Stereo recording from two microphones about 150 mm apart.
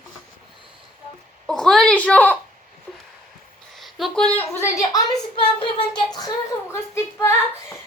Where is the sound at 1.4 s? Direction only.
5° left (ahead or behind).